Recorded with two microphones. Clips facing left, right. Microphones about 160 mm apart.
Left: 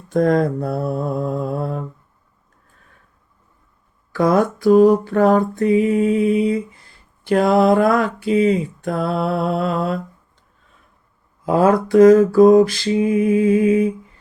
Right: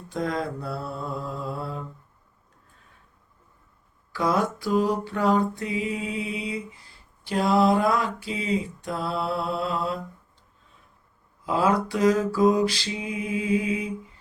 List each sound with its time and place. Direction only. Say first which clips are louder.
0.1 s mantra: left 12 dB; 50° left (ahead or behind)
4.1 s a sound: left 8 dB; 50° left (ahead or behind)
11.4 s mantra: left 8 dB; 50° left (ahead or behind)